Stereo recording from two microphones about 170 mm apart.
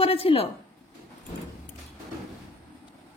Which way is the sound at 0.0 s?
35° left (ahead or behind).